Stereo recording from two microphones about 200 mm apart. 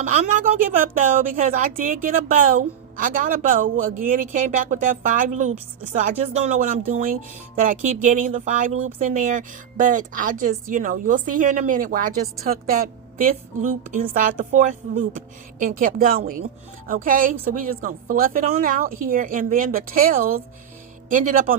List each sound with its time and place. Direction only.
0.9 s a woman's voice: 40° right (ahead or behind)